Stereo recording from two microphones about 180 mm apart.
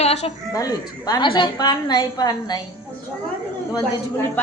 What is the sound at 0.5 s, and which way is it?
A woman's voice, 20° left (ahead or behind).